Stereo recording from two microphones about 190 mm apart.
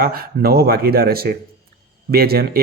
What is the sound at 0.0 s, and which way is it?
Speech, 50° right (ahead or behind).